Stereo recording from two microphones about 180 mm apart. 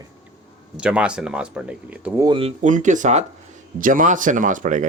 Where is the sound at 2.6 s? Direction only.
45° right (ahead or behind).